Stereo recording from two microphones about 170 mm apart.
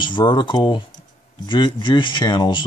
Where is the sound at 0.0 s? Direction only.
25° left (ahead or behind).